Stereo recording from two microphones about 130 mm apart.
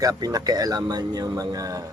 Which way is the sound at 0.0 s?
30° right (ahead or behind).